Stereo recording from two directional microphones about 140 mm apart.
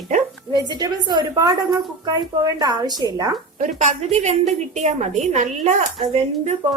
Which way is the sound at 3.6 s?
55° right (ahead or behind).